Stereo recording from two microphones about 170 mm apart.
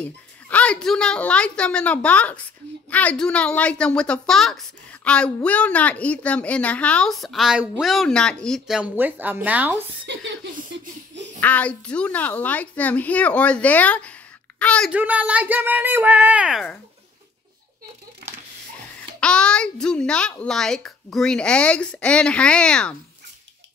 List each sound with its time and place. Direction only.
0.0 s a child's voice: 5° left (ahead or behind); by 9.8 s 10° right (ahead or behind)
10.0 s speech: 90° right
11.3 s a child's voice: 10° left (ahead or behind)
14.9 s speech: 10° right (ahead or behind)
19.1 s a child's voice: 5° left (ahead or behind)